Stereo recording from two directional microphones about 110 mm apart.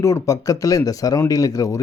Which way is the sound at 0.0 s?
30° left (ahead or behind).